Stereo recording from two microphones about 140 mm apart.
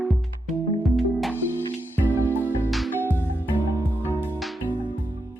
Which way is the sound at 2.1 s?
15° right (ahead or behind).